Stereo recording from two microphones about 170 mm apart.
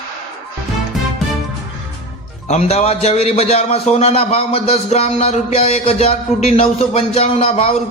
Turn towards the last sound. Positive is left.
turn(degrees=35)  # may be behind; listen again after turning